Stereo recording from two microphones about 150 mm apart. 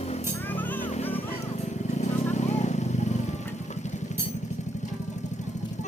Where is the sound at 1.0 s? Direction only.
40° left (ahead or behind).